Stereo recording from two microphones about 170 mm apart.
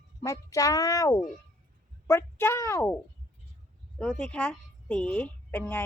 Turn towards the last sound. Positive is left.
turn(degrees=10)  # may be behind; listen again after turning